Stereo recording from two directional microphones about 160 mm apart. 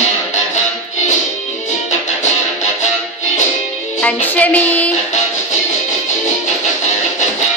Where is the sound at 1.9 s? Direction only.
45° left (ahead or behind).